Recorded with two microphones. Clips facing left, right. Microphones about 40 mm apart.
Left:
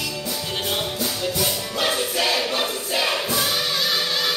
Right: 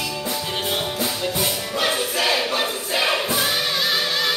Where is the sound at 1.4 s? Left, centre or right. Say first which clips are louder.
Right 1 dB; centre.